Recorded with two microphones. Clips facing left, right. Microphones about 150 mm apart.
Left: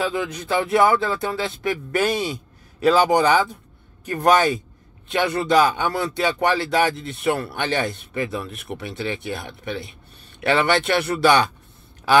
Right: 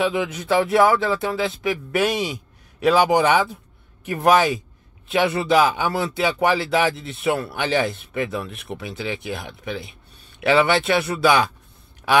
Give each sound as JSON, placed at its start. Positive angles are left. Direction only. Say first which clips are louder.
{"t": 0.0, "sound": "speech", "louder": "right 2 dB", "side_deg": 0}